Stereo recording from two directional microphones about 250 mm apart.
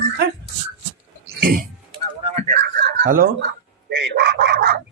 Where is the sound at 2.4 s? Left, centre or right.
Right.